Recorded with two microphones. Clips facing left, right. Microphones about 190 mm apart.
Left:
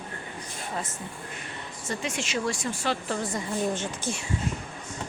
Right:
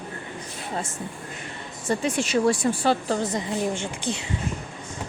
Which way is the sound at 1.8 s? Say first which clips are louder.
Right 8 dB; 35° right (ahead or behind).